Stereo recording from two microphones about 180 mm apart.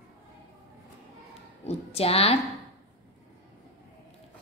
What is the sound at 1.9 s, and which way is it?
Speech, 35° left (ahead or behind).